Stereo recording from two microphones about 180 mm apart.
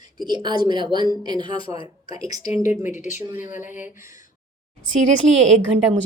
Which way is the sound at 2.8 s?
45° left (ahead or behind).